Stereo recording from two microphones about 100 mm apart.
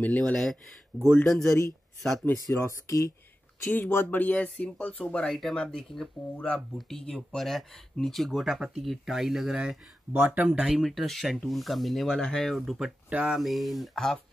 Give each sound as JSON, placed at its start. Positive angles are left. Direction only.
{"t": 0.0, "sound": "speech", "side_deg": 15}
{"t": 0.9, "sound": "speech", "side_deg": 0}
{"t": 2.2, "sound": "speech", "side_deg": 25}
{"t": 13.1, "sound": "speech", "side_deg": -10}
{"t": 13.4, "sound": "speech", "side_deg": 0}